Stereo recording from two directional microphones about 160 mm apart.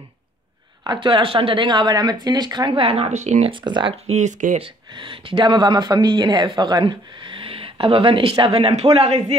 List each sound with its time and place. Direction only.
0.8 s speech: 30° right (ahead or behind)
3.6 s speech: 30° right (ahead or behind)
4.1 s speech: 50° right (ahead or behind)
4.6 s speech: 30° right (ahead or behind)